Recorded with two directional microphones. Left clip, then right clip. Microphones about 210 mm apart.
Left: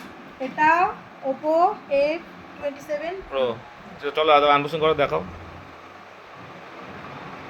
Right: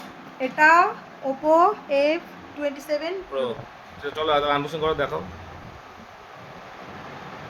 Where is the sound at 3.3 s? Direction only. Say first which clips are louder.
Left 7 dB; centre (ahead or behind).